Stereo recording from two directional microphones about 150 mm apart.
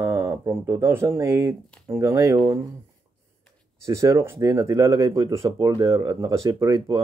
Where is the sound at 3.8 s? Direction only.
20° right (ahead or behind).